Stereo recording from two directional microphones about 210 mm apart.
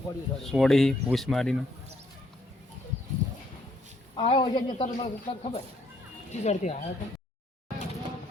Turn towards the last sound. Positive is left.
turn(degrees=35)  # may be behind; listen again after turning